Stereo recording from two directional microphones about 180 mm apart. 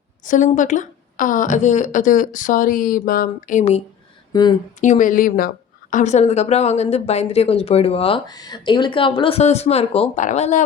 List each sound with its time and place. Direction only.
0.3 s a woman's voice: 45° left (ahead or behind)
4.3 s speech: 20° left (ahead or behind)
4.8 s a woman's voice: 45° left (ahead or behind)